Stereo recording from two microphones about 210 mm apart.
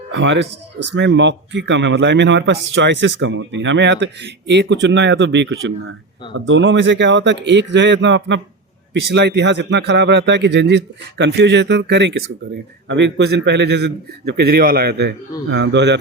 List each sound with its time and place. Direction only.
0.1 s a man's voice: 60° right (ahead or behind)